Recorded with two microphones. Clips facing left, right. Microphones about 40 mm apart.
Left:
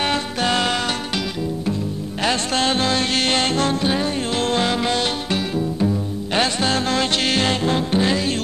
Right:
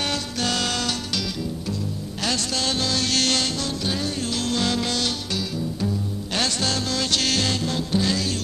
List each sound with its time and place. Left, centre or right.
0.0 s music: left
2.2 s music: left
3.4 s music: left